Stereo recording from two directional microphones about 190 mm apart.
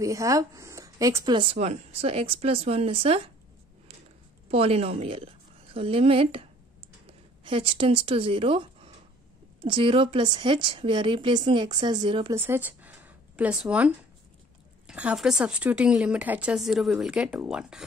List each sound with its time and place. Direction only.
0.0 s speech: 15° right (ahead or behind)
4.5 s a woman's voice: 30° right (ahead or behind)
12.4 s a woman's voice: 10° right (ahead or behind)